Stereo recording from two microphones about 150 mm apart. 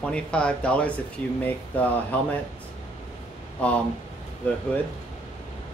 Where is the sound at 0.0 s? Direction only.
5° left (ahead or behind).